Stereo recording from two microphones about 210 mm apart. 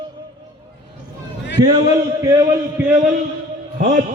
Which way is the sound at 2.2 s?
15° right (ahead or behind).